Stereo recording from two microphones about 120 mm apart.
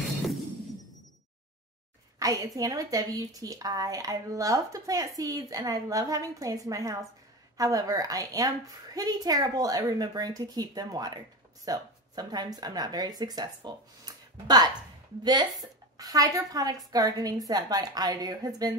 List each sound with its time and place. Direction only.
2.1 s a woman's voice: 30° right (ahead or behind)
15.2 s a woman's voice: 35° right (ahead or behind)